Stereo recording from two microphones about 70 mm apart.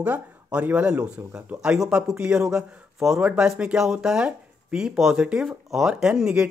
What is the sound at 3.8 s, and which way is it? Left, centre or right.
Speech, centre.